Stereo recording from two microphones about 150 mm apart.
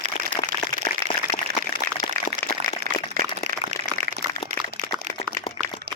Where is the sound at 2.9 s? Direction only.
90° right.